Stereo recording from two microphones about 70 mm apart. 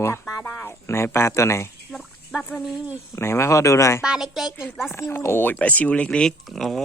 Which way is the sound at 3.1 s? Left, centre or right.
Left.